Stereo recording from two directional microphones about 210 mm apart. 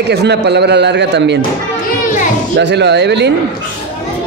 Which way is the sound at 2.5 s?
55° right (ahead or behind).